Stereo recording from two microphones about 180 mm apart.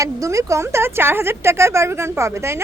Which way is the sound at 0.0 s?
15° right (ahead or behind).